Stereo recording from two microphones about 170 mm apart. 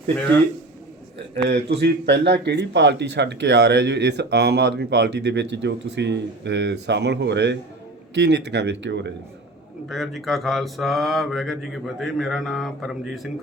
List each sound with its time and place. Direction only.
1.5 s speech: 75° right (ahead or behind)
9.9 s mantra: centre (ahead or behind)